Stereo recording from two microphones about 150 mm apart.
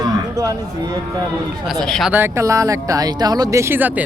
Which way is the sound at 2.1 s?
15° right (ahead or behind).